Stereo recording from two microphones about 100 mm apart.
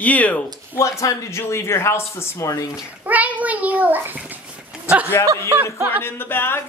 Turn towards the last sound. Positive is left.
turn(degrees=20)  # may be behind; listen again after turning